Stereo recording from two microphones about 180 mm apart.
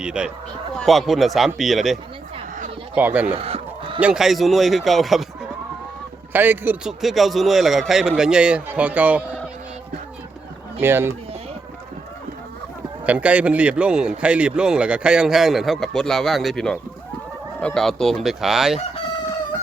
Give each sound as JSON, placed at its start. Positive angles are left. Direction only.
{"t": 0.0, "sound": "a man's voice", "side_deg": -5}
{"t": 3.2, "sound": "fowl", "side_deg": -35}
{"t": 4.0, "sound": "a man's voice", "side_deg": -5}
{"t": 6.3, "sound": "a man's voice", "side_deg": -10}
{"t": 10.8, "sound": "speech", "side_deg": -10}
{"t": 13.1, "sound": "a man's voice", "side_deg": -5}